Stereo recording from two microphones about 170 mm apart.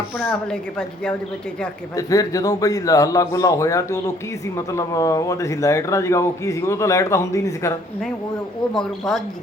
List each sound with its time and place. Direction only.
0.2 s a woman's voice: 5° left (ahead or behind)
2.0 s a man's voice: 20° left (ahead or behind)
8.7 s a woman's voice: centre (ahead or behind)